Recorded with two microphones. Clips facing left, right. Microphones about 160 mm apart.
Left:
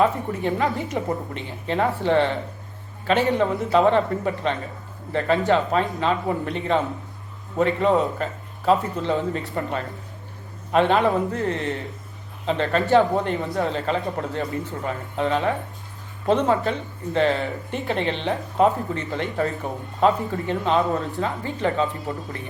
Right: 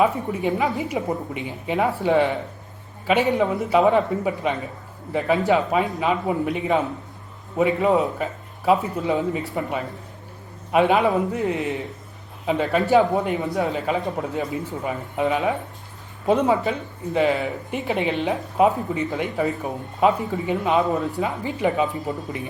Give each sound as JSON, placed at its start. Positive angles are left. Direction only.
{"t": 0.0, "sound": "speech", "side_deg": -5}
{"t": 21.2, "sound": "speech", "side_deg": -15}